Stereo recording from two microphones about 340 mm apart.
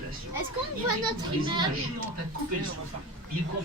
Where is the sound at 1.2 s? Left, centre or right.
Centre.